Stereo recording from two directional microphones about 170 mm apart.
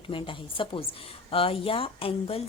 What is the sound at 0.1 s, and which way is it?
A woman's voice, 30° left (ahead or behind).